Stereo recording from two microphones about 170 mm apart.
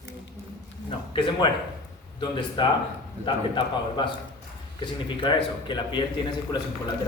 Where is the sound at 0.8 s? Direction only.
25° left (ahead or behind).